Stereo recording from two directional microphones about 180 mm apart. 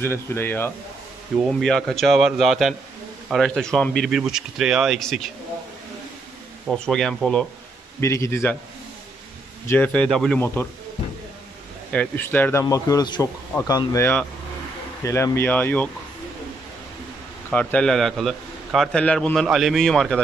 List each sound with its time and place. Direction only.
0.0 s a man's voice: 15° left (ahead or behind)
6.7 s a man's voice: 5° left (ahead or behind)
8.0 s speech: 15° left (ahead or behind)
9.7 s speech: 10° left (ahead or behind)
11.9 s speech: 10° left (ahead or behind)
17.5 s a man's voice: 5° left (ahead or behind)